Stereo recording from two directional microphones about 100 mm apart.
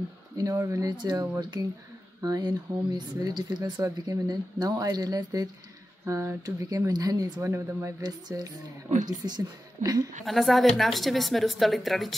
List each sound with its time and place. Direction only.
0.4 s speech: 30° right (ahead or behind)
7.4 s speech: 30° right (ahead or behind)
8.0 s speech: 40° right (ahead or behind)
10.2 s a woman's voice: centre (ahead or behind)